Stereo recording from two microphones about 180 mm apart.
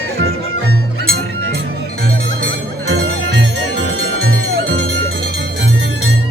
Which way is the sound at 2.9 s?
85° right.